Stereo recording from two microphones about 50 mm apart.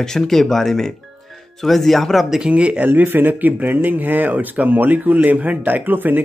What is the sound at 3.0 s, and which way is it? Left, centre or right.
Speech, right.